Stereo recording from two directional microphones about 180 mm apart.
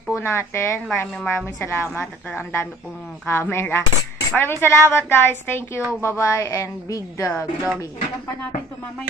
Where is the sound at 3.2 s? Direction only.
15° left (ahead or behind).